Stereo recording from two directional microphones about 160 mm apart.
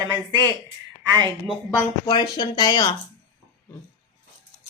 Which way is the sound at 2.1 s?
25° left (ahead or behind).